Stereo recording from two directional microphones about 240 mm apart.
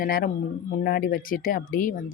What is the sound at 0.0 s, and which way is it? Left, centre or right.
Speech, left.